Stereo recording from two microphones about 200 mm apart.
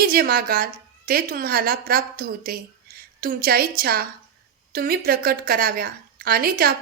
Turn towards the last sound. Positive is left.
turn(degrees=-45)  # may be behind; listen again after turning